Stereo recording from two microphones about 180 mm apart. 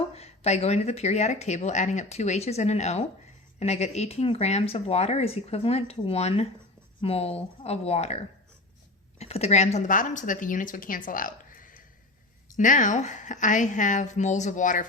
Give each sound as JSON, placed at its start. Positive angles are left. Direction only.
{"t": 0.1, "sound": "a woman's voice", "side_deg": 35}